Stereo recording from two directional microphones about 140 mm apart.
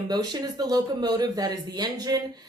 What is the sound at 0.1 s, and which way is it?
Speech, 30° right (ahead or behind).